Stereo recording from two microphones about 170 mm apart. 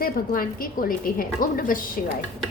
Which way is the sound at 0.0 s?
60° left (ahead or behind).